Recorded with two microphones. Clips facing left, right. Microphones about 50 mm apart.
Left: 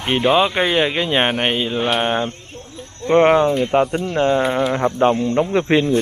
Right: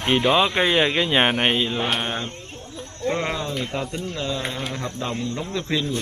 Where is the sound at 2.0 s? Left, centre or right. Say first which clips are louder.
Left 8 dB; left.